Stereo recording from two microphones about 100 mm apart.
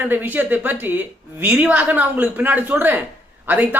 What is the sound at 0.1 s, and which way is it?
A woman's voice, 20° right (ahead or behind).